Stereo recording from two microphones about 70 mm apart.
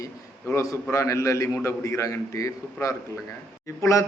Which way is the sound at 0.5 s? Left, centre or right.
Left.